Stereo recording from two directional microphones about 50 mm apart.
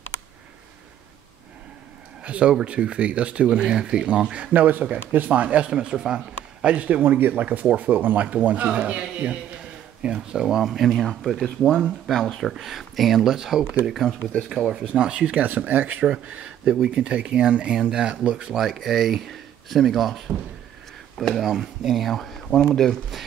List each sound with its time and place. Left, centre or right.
2.2 s speech: right
6.6 s speech: right
10.4 s speech: centre
14.8 s speech: centre
18.5 s speech: centre